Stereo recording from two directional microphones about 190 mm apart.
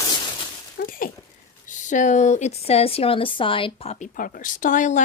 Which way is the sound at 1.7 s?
40° left (ahead or behind).